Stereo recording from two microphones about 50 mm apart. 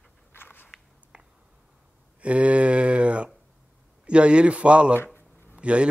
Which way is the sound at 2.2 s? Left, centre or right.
Right.